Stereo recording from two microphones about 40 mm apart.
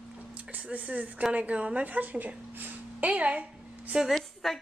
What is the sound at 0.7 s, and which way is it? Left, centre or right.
A woman's voice, right.